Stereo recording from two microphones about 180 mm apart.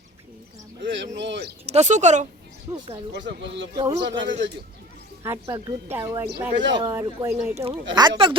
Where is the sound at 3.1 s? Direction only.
75° right (ahead or behind).